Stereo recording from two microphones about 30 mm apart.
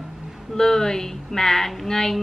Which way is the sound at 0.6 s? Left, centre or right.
Centre.